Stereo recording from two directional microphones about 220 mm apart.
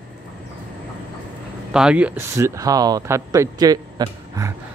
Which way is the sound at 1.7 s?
5° right (ahead or behind).